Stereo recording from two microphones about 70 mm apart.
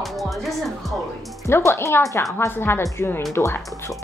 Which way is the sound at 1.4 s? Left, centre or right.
Left.